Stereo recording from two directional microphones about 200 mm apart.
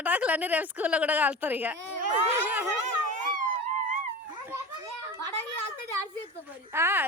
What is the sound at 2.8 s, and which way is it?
Police car, 40° right (ahead or behind).